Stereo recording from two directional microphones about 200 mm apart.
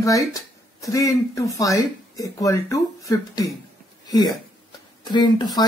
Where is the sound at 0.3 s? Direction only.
15° left (ahead or behind).